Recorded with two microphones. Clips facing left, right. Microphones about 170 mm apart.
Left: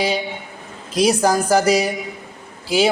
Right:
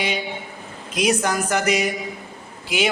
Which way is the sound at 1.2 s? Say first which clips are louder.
Left 6 dB; 35° left (ahead or behind).